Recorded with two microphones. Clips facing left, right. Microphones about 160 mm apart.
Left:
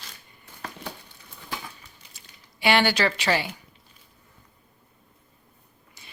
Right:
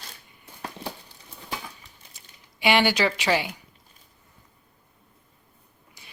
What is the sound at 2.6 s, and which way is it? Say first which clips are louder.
Speech: even; 15° right (ahead or behind).